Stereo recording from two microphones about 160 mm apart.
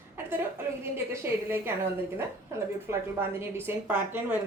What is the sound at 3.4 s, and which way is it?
Speech, 15° right (ahead or behind).